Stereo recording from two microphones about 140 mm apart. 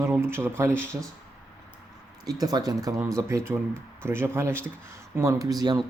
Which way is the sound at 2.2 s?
30° right (ahead or behind).